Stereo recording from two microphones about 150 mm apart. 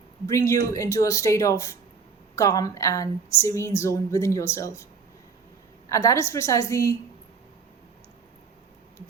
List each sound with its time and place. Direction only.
0.3 s speech: 20° left (ahead or behind)
5.9 s speech: 20° left (ahead or behind)